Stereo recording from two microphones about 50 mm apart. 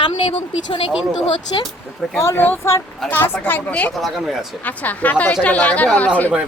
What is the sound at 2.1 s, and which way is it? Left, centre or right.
Speech, left.